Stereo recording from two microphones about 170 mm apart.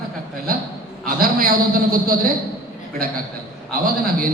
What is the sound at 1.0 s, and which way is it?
A man's voice, 60° right (ahead or behind).